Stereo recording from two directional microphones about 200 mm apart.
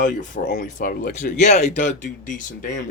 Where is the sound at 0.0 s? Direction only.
40° left (ahead or behind).